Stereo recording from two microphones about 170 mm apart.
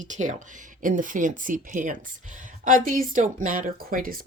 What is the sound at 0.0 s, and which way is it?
Speech, 45° right (ahead or behind).